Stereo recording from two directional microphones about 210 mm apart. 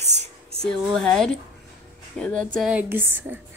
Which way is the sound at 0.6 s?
Centre (ahead or behind).